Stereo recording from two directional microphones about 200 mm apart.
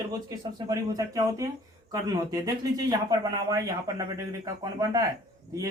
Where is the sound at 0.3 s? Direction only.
15° right (ahead or behind).